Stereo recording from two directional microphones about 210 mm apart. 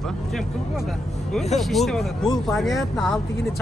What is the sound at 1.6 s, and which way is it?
Speech, centre (ahead or behind).